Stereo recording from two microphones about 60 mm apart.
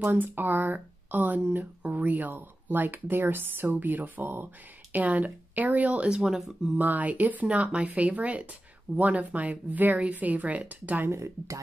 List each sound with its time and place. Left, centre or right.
0.0 s speech: right; by 6.5 s centre
6.8 s speech: right
11.1 s speech: right